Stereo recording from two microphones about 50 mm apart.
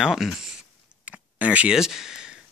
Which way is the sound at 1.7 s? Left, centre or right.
Centre.